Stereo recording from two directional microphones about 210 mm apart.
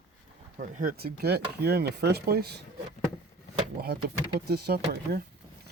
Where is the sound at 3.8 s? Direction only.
50° right (ahead or behind).